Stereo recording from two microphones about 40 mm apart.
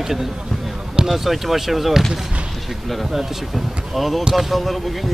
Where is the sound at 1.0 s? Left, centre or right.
Centre.